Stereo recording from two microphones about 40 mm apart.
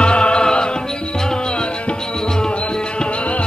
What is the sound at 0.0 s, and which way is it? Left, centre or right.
Music, left.